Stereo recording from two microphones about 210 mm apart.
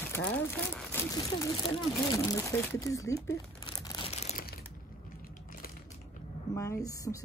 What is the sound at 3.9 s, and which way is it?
Crumpling, 25° left (ahead or behind).